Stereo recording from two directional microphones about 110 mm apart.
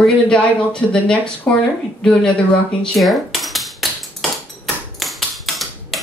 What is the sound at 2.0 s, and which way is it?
Speech, 5° left (ahead or behind).